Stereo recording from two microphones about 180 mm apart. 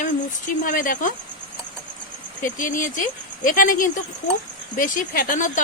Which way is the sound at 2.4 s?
45° left (ahead or behind).